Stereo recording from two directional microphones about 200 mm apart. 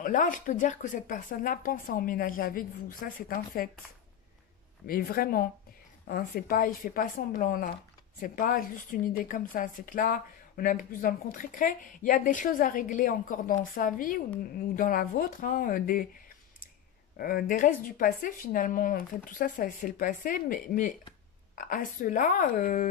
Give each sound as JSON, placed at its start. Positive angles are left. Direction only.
{"t": 0.0, "sound": "a woman's voice", "side_deg": 40}
{"t": 4.8, "sound": "a woman's voice", "side_deg": 45}
{"t": 17.2, "sound": "a woman's voice", "side_deg": 45}